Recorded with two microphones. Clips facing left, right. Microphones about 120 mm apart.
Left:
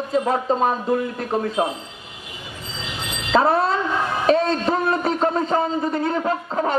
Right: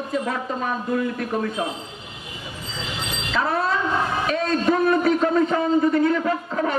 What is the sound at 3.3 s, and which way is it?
A man's voice, 30° left (ahead or behind).